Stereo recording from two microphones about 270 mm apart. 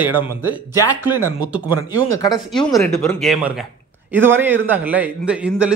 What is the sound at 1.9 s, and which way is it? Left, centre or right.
Speech, centre.